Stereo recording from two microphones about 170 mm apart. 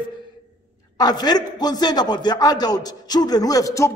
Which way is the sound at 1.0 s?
25° left (ahead or behind).